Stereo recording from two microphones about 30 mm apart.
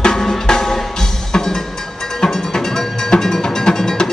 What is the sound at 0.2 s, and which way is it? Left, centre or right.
Drum, centre.